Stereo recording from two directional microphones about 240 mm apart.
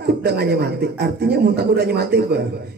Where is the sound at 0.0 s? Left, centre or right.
Right.